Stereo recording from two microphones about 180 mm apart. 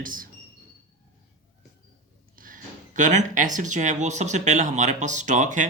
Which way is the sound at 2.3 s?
50° right (ahead or behind).